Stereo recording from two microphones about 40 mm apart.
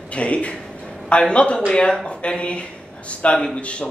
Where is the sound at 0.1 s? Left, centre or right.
Left.